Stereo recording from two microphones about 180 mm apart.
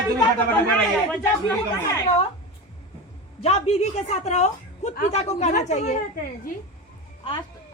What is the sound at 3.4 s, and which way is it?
A woman's voice, 35° left (ahead or behind).